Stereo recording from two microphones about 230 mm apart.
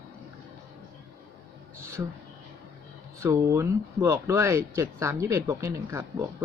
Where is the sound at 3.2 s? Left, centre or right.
Centre.